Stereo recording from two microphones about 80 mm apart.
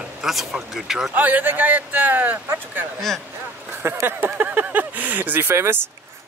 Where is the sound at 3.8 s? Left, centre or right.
Right.